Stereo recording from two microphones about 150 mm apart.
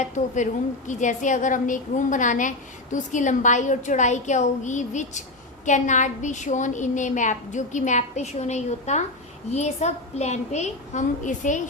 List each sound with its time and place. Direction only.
0.2 s a woman's voice: 50° left (ahead or behind)